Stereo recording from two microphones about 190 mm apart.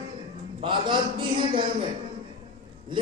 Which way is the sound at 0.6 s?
25° right (ahead or behind).